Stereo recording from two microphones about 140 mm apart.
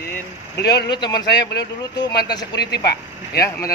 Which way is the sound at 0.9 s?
30° left (ahead or behind).